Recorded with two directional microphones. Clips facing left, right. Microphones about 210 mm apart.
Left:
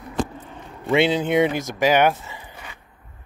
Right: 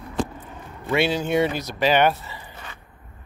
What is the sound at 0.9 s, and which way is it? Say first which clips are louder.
Speech: left 3 dB; 20° left (ahead or behind).